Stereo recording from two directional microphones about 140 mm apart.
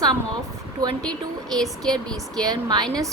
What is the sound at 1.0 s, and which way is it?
Speech, 5° left (ahead or behind).